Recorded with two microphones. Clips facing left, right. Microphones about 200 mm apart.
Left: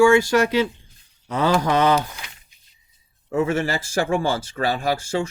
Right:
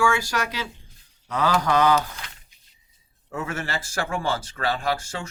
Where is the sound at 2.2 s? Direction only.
10° left (ahead or behind).